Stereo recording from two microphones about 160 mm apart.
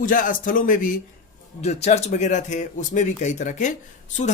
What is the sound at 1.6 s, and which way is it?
Speech, 45° left (ahead or behind).